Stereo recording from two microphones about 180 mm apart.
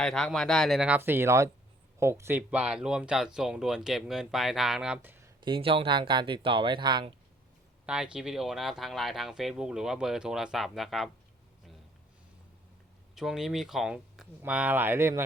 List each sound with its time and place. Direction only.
0.0 s speech: 5° left (ahead or behind)
5.4 s speech: 30° right (ahead or behind)
7.9 s speech: 5° right (ahead or behind)
13.1 s speech: centre (ahead or behind)